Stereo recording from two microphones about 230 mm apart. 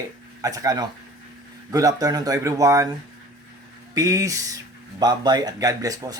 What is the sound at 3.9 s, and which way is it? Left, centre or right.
Speech, centre.